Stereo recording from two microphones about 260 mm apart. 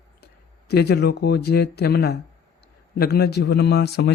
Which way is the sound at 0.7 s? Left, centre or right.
Left.